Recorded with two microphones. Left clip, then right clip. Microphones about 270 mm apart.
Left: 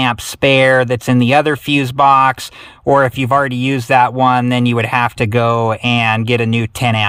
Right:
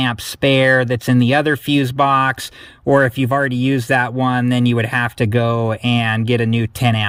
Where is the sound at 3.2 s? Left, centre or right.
Centre.